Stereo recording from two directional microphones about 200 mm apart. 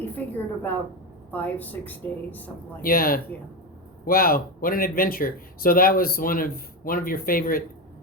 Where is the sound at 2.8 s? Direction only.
45° left (ahead or behind).